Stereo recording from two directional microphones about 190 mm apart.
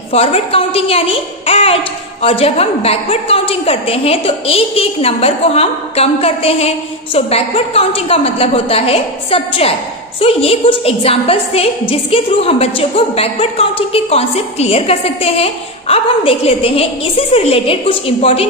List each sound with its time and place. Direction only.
0.1 s a woman's voice: 30° left (ahead or behind)